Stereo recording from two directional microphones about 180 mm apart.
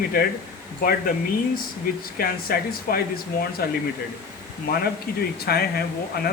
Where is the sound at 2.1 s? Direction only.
55° left (ahead or behind).